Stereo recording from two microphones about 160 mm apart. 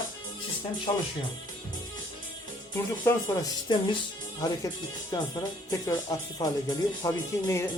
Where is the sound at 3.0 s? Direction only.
25° left (ahead or behind).